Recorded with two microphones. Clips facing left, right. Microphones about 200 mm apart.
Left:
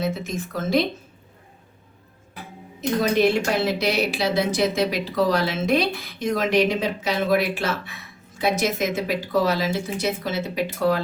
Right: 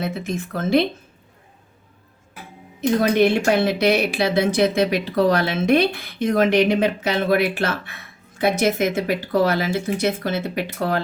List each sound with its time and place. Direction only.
0.0 s speech: 55° right (ahead or behind)
3.0 s speech: 60° right (ahead or behind)